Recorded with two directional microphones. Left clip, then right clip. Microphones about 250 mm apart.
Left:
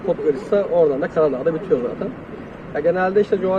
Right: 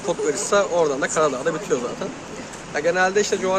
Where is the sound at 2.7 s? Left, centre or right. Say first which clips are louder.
Left 2 dB; centre.